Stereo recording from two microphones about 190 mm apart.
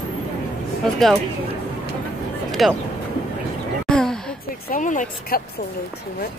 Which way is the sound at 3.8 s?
5° left (ahead or behind).